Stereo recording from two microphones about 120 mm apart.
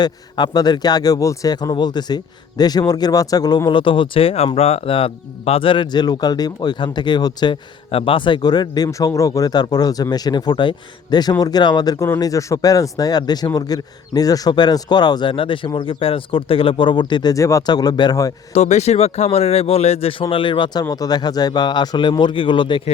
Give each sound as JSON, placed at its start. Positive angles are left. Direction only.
{"t": 0.0, "sound": "speech", "side_deg": 35}
{"t": 7.9, "sound": "speech", "side_deg": 50}
{"t": 18.5, "sound": "speech", "side_deg": 65}